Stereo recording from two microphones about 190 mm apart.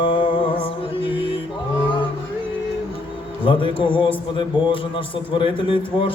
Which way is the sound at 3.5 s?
25° left (ahead or behind).